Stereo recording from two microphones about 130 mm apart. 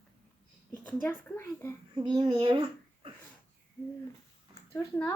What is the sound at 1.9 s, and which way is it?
Speech, 35° right (ahead or behind).